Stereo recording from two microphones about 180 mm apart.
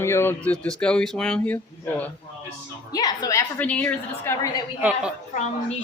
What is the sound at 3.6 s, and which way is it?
Speech, 10° left (ahead or behind).